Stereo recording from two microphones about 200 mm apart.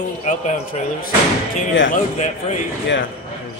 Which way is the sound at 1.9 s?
35° left (ahead or behind).